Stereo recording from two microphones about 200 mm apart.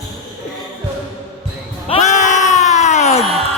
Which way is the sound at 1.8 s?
35° left (ahead or behind).